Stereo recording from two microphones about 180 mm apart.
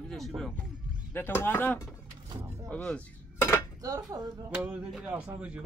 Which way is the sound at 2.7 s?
5° left (ahead or behind).